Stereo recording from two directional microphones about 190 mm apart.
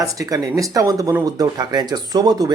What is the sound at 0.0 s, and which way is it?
Speech, 20° right (ahead or behind).